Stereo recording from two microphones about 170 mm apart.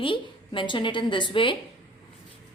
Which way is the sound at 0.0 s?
30° left (ahead or behind).